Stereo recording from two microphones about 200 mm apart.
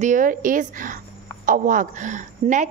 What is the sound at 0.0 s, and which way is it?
A woman's voice, 40° right (ahead or behind).